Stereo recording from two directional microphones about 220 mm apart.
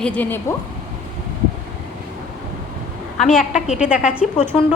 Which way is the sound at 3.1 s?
Centre (ahead or behind).